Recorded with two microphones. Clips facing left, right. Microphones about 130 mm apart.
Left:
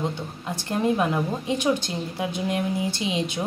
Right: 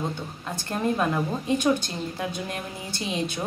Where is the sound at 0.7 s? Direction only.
15° left (ahead or behind).